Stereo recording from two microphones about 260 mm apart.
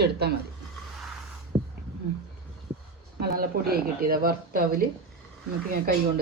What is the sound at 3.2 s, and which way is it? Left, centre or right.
A woman's voice, right.